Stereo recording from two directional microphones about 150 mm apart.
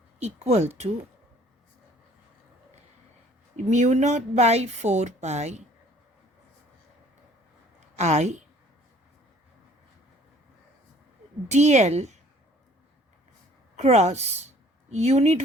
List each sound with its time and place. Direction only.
0.2 s speech: 45° right (ahead or behind)
3.6 s speech: 50° right (ahead or behind)
7.9 s speech: 50° right (ahead or behind)
11.4 s speech: 50° right (ahead or behind)
13.7 s speech: 45° right (ahead or behind)